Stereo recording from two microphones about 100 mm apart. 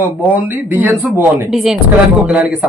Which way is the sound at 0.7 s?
20° right (ahead or behind).